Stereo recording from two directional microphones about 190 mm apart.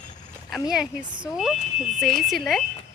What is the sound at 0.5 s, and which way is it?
Speech, centre (ahead or behind).